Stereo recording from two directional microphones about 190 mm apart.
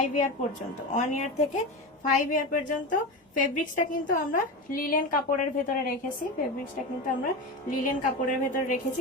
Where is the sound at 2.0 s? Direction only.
45° left (ahead or behind).